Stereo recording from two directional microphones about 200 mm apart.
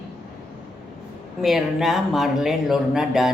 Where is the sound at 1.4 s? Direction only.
Centre (ahead or behind).